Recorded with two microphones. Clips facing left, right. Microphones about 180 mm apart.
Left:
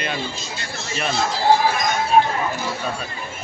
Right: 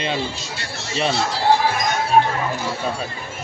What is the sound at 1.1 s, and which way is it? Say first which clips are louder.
Speech: left 3 dB; 75° right (ahead or behind).